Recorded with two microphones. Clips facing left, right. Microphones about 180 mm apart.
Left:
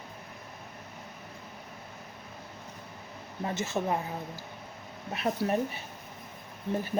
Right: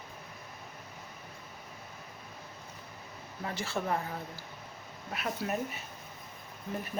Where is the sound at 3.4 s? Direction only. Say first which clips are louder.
Left 4 dB; 20° left (ahead or behind).